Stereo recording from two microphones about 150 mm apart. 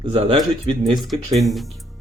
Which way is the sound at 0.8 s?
Centre (ahead or behind).